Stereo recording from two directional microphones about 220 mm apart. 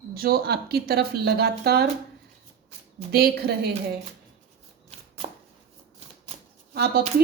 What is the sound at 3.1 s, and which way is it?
Speech, 45° right (ahead or behind).